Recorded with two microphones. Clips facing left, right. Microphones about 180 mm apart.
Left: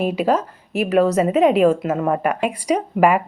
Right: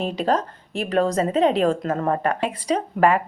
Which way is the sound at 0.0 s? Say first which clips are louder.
Left 3 dB; 10° left (ahead or behind).